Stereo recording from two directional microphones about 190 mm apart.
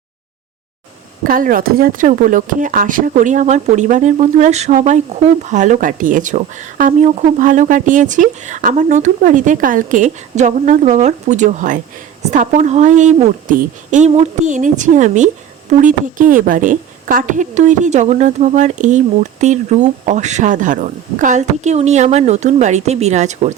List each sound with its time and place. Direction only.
1.2 s a woman's voice: 45° right (ahead or behind)